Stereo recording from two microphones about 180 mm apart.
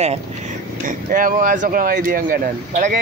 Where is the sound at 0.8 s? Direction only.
50° right (ahead or behind).